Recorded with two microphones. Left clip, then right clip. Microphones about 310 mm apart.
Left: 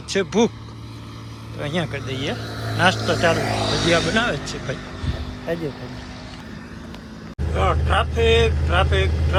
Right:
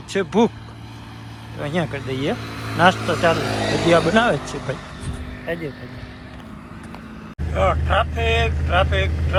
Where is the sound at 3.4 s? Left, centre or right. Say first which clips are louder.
Right 1 dB; right.